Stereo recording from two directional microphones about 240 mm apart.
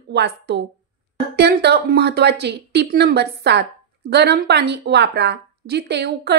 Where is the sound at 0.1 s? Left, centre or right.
Right.